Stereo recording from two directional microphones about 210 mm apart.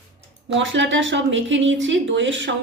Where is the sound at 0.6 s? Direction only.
60° right (ahead or behind).